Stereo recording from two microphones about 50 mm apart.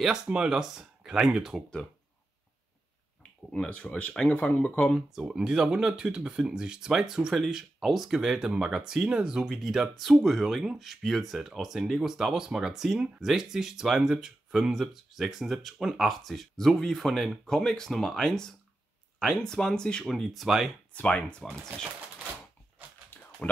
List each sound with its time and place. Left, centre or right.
0.0 s speech: centre
3.2 s speech: left
5.1 s speech: centre
20.1 s speech: centre
20.9 s speech: left
23.1 s a sound: left